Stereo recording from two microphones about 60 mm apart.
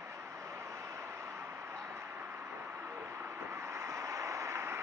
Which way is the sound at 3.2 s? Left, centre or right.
Right.